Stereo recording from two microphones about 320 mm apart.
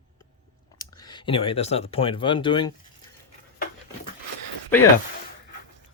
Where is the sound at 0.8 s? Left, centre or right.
Centre.